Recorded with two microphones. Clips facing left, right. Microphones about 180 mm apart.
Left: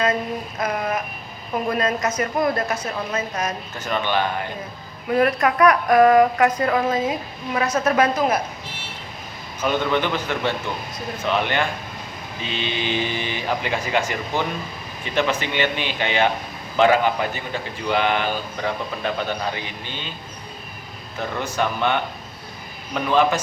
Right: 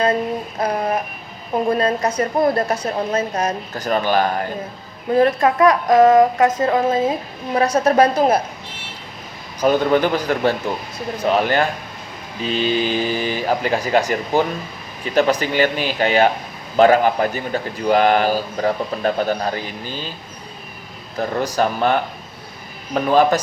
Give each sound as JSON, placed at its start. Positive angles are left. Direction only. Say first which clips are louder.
{"t": 0.6, "sound": "a sound", "louder": "right 4 dB", "side_deg": -35}
{"t": 1.6, "sound": "a man's voice", "louder": "right 4 dB", "side_deg": -30}
{"t": 5.1, "sound": "a man's voice", "louder": "right 4 dB", "side_deg": -30}
{"t": 9.6, "sound": "a man's voice", "louder": "right 6 dB", "side_deg": -40}
{"t": 21.2, "sound": "a man's voice", "louder": "right 5 dB", "side_deg": -35}